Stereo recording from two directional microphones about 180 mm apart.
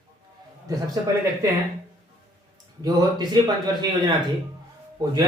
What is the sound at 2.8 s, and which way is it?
Speech, 25° right (ahead or behind).